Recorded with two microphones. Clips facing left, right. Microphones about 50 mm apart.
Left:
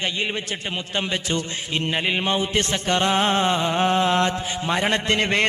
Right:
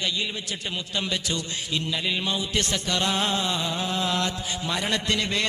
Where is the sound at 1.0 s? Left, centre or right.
Left.